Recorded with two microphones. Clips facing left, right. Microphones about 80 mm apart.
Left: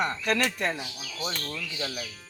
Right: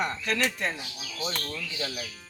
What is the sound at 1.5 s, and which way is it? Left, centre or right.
Speech, centre.